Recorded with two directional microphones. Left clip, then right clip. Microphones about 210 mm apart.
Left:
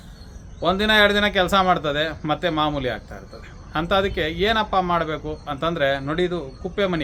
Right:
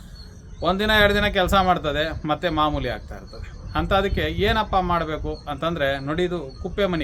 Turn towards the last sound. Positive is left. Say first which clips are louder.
# even
turn(degrees=5)  # may be behind; listen again after turning